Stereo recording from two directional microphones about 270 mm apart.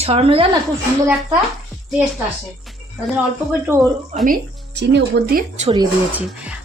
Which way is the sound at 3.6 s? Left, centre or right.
Centre.